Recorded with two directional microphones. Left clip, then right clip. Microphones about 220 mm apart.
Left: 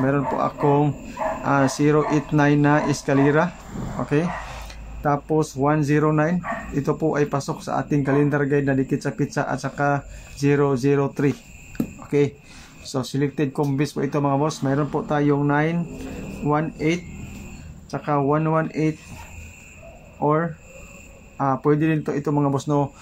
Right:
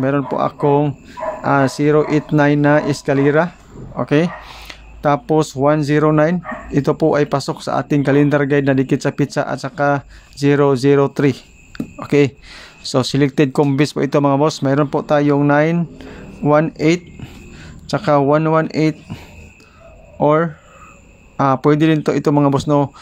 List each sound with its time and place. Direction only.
0.0 s speech: 40° right (ahead or behind)
20.2 s speech: 45° right (ahead or behind)